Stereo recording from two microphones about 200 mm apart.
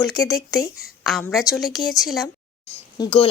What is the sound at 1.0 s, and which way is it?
A woman's voice, centre (ahead or behind).